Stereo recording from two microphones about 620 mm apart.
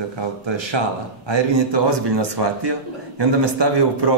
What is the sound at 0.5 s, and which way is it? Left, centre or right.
A man's voice, right.